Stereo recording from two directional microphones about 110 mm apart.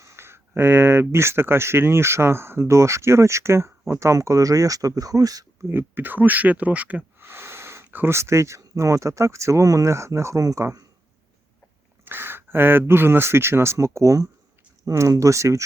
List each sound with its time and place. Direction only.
0.0 s speech: 25° right (ahead or behind)
5.6 s speech: 20° right (ahead or behind)
12.0 s speech: 20° right (ahead or behind)